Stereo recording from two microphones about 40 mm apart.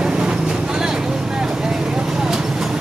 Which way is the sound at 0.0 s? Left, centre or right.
Right.